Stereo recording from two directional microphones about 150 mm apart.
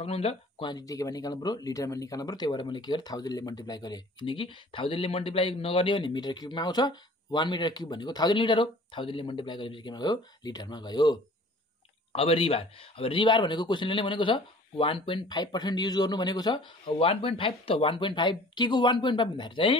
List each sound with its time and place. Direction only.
0.0 s speech: 40° left (ahead or behind)